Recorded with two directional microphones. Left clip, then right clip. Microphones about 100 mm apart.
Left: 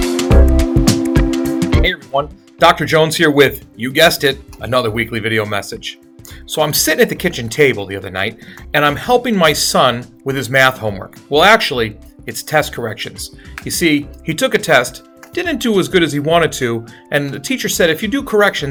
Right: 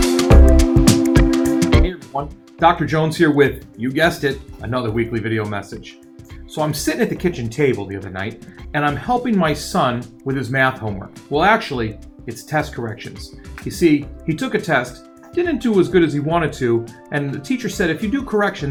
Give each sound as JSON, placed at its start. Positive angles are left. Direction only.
{"t": 0.3, "sound": "music", "side_deg": -5}
{"t": 2.6, "sound": "speech", "side_deg": 25}